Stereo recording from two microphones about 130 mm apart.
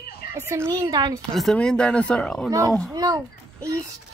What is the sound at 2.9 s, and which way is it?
Speech, 30° right (ahead or behind).